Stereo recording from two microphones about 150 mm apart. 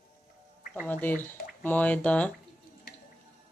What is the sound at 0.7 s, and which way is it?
Speech, 10° left (ahead or behind).